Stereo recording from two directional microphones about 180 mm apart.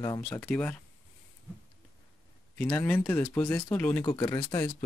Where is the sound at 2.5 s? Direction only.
10° left (ahead or behind).